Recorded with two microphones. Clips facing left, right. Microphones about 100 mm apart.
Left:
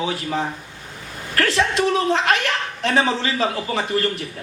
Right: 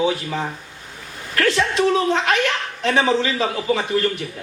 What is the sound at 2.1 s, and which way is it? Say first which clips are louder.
Speech: even; 35° left (ahead or behind).